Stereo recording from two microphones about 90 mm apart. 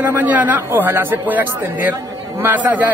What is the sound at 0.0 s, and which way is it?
Speech, 20° right (ahead or behind).